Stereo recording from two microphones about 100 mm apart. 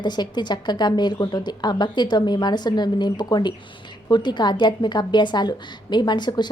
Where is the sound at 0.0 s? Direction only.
45° left (ahead or behind).